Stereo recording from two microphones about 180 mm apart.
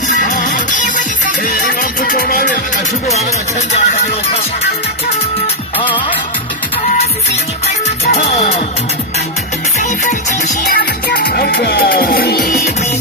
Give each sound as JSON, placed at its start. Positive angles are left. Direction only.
{"t": 0.2, "sound": "music", "side_deg": 45}
{"t": 3.7, "sound": "speech", "side_deg": 40}
{"t": 8.0, "sound": "music", "side_deg": 35}
{"t": 9.8, "sound": "music", "side_deg": 40}
{"t": 10.7, "sound": "music", "side_deg": 60}